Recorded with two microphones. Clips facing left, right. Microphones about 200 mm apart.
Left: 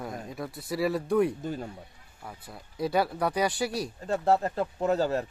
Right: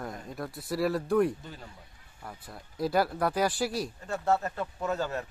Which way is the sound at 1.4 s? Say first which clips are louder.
Left 12 dB; 45° left (ahead or behind).